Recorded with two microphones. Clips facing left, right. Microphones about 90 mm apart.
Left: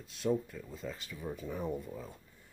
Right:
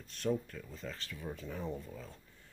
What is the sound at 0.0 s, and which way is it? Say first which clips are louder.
Speech: left 2 dB; 5° left (ahead or behind).